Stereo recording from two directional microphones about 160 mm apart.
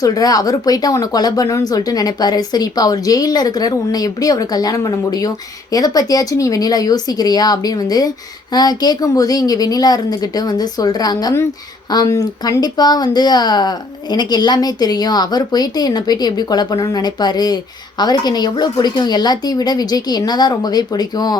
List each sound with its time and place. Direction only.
0.0 s speech: 20° left (ahead or behind)